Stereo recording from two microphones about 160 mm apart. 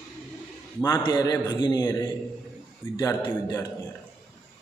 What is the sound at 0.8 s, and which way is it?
A man's voice, 25° left (ahead or behind).